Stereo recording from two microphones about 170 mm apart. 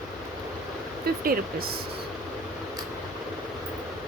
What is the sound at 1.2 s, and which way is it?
Speech, 60° right (ahead or behind).